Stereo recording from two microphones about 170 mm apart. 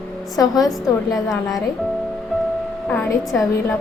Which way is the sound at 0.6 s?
Centre (ahead or behind).